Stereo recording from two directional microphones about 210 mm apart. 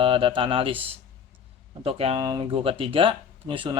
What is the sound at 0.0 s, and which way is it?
Speech, 25° right (ahead or behind).